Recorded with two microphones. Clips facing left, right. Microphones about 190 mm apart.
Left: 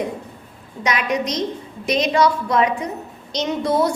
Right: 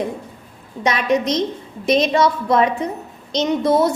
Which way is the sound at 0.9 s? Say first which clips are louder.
Right 4 dB; 25° right (ahead or behind).